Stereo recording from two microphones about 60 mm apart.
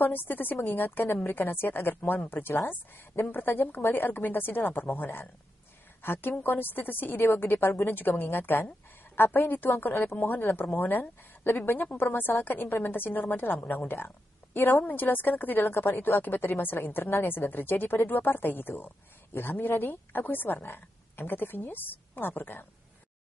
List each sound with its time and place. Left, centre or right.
0.0 s a woman's voice: left